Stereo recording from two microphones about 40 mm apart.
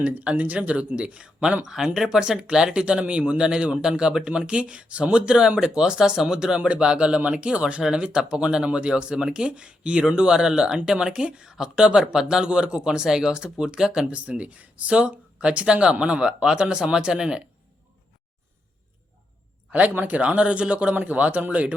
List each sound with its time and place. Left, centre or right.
0.0 s speech: right; by 6.5 s centre
6.5 s speech: right
7.8 s speech: centre
14.1 s speech: right
14.8 s speech: right
19.7 s speech: right
20.1 s speech: right
20.9 s speech: right